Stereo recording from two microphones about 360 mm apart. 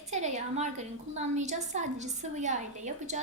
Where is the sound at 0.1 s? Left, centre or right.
Centre.